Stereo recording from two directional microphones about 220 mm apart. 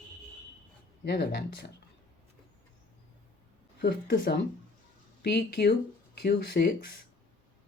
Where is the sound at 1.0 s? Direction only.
50° left (ahead or behind).